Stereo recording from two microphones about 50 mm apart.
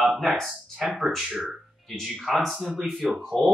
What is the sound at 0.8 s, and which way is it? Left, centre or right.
Speech, centre.